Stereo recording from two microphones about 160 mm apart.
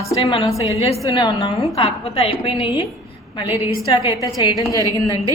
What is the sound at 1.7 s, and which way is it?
Speech, 35° left (ahead or behind).